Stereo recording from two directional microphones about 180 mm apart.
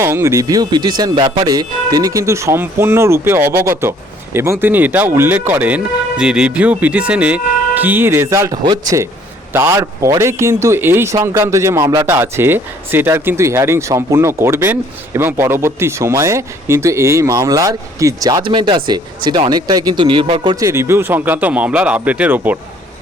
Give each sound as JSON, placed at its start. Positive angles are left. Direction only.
{"t": 0.0, "sound": "speech", "side_deg": -15}